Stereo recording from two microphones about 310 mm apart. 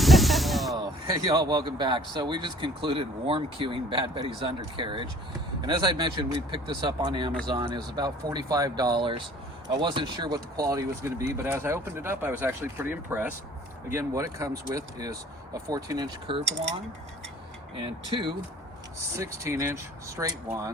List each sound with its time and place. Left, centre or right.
0.0 s spray: centre
1.1 s speech: centre
17.7 s speech: centre